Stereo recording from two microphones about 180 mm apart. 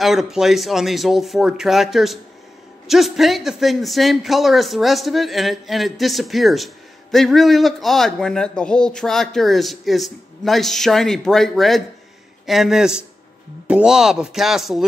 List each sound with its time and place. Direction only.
0.0 s a man's voice: centre (ahead or behind)